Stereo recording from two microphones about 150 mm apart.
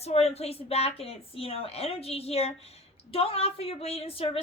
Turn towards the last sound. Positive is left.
turn(degrees=40)  # may be behind; listen again after turning